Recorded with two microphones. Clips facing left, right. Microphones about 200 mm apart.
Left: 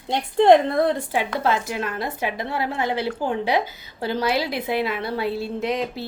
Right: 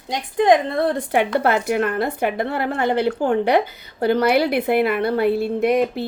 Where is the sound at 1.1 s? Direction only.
65° right (ahead or behind).